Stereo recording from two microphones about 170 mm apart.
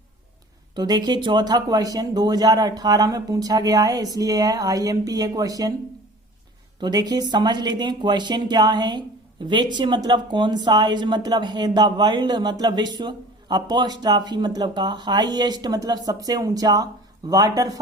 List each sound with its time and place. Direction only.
0.8 s speech: 25° right (ahead or behind)
6.7 s speech: 25° right (ahead or behind)